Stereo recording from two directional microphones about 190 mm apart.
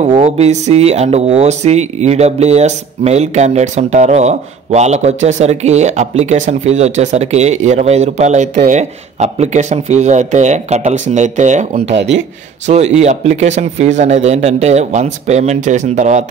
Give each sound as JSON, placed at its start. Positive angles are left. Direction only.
{"t": 0.1, "sound": "speech", "side_deg": -35}
{"t": 11.8, "sound": "speech", "side_deg": -65}
{"t": 12.6, "sound": "speech", "side_deg": -35}